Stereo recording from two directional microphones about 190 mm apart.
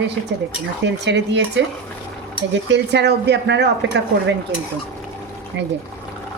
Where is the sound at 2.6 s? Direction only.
65° right (ahead or behind).